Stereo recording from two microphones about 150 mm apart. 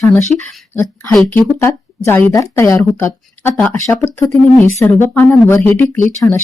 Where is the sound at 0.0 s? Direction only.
15° left (ahead or behind).